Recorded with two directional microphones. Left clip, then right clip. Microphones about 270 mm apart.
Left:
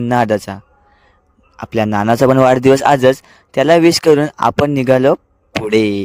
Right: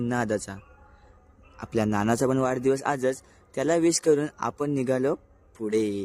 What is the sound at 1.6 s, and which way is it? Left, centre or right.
Speech, left.